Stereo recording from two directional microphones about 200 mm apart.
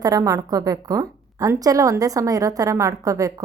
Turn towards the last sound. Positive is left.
turn(degrees=-15)  # may be behind; listen again after turning